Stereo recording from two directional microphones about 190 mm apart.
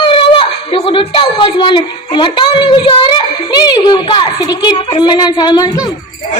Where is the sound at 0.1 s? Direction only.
30° left (ahead or behind).